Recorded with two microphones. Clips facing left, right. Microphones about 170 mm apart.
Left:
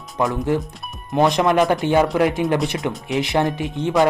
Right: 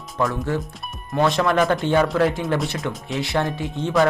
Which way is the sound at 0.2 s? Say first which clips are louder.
Left 3 dB; 15° left (ahead or behind).